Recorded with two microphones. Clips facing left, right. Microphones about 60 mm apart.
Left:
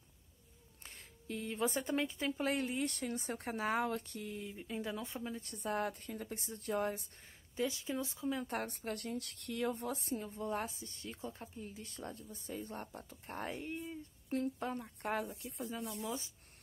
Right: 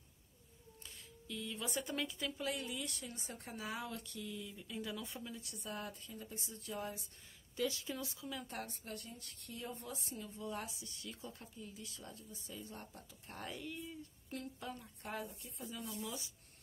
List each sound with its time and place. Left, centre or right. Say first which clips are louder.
0.8 s speech: left 5 dB; left
7.5 s speech: left 3 dB; left
8.5 s speech: left 7 dB; left
9.9 s a woman's voice: left 7 dB; left
16.0 s a woman's voice: left 4 dB; left